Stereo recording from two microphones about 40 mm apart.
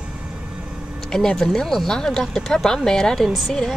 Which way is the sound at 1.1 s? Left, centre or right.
Centre.